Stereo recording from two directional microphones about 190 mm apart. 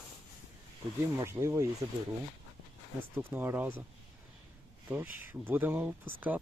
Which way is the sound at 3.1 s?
10° right (ahead or behind).